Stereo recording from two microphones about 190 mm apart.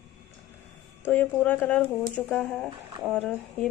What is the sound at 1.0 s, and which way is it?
Speech, 10° left (ahead or behind).